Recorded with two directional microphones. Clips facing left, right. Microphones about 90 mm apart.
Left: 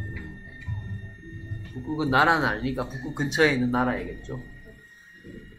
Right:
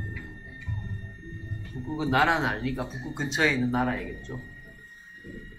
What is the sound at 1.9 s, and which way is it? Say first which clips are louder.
Speech: left 3 dB; 10° left (ahead or behind).